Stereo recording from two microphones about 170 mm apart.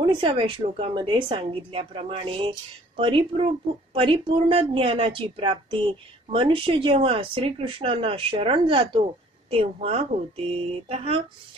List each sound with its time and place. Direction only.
0.0 s speech: 30° right (ahead or behind)